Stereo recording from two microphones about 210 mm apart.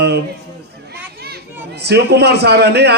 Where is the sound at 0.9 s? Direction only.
50° right (ahead or behind).